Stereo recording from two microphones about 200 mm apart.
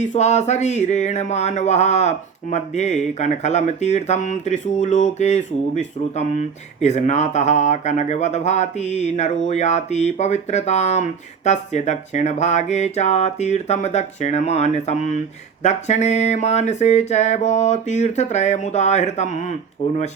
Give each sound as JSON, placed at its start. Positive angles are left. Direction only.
{"t": 0.0, "sound": "speech", "side_deg": 35}